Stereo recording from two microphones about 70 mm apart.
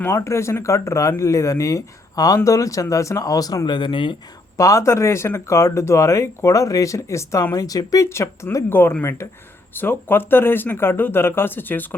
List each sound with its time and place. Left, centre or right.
0.3 s speech: left
4.5 s speech: left
7.5 s speech: left
8.1 s speech: left
8.7 s speech: left
9.0 s speech: left